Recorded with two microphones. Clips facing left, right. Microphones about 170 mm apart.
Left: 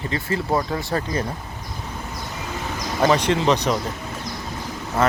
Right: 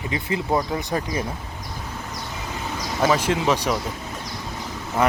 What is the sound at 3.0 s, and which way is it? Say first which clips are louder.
Speech: left 2 dB; 5° right (ahead or behind).